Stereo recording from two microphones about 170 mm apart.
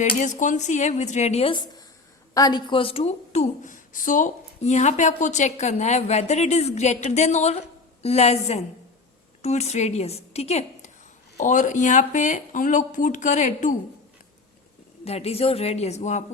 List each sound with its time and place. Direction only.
0.0 s speech: 45° left (ahead or behind)
2.3 s a woman's voice: 20° left (ahead or behind); by 13.7 s 45° left (ahead or behind)
15.0 s a woman's voice: 35° left (ahead or behind)